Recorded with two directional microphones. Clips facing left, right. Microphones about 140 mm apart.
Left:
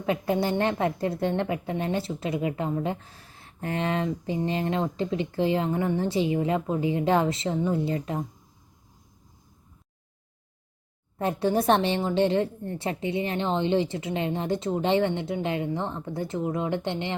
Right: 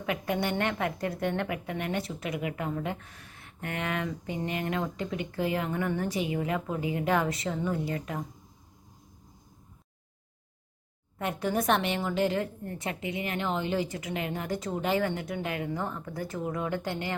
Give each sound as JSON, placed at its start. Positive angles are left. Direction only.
{"t": 0.0, "sound": "a woman's voice", "side_deg": 30}
{"t": 11.2, "sound": "a woman's voice", "side_deg": 30}